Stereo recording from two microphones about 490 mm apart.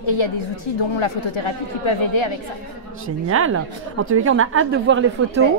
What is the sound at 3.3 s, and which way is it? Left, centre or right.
Speech, right.